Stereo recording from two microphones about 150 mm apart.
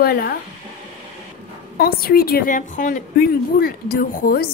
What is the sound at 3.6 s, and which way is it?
Speech, 80° left.